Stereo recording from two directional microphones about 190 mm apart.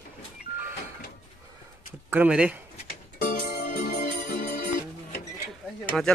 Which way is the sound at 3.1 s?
55° left (ahead or behind).